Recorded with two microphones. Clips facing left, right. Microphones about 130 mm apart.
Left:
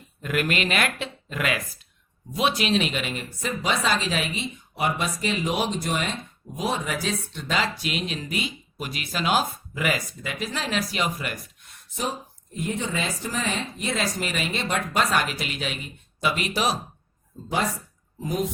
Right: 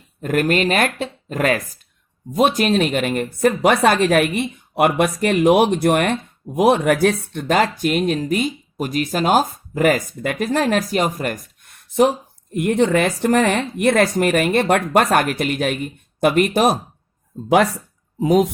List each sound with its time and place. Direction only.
0.2 s speech: 40° right (ahead or behind)
18.2 s speech: 85° right